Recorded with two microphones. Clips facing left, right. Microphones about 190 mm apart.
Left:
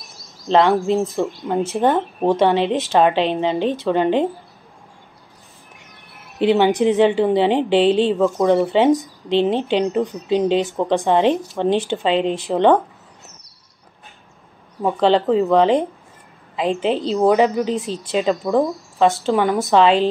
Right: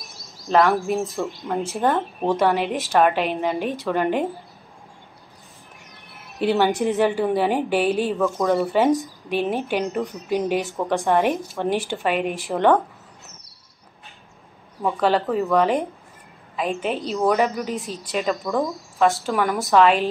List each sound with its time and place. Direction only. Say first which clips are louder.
0.5 s speech: left 3 dB; 25° left (ahead or behind)
6.3 s speech: left 4 dB; 20° left (ahead or behind)
14.8 s speech: left 4 dB; 20° left (ahead or behind)
16.8 s a woman's voice: left 6 dB; 30° left (ahead or behind)
17.2 s speech: left 5 dB; 20° left (ahead or behind)
17.8 s a woman's voice: left 5 dB; 35° left (ahead or behind)
18.5 s speech: left 5 dB; 20° left (ahead or behind)